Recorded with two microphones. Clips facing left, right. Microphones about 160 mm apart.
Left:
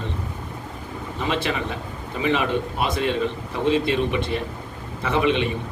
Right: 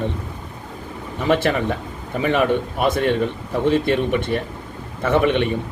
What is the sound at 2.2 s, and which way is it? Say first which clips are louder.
A man's voice: right 4 dB; 55° right (ahead or behind).